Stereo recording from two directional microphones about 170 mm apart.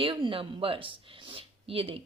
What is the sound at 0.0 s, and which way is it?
A woman's voice, 30° right (ahead or behind).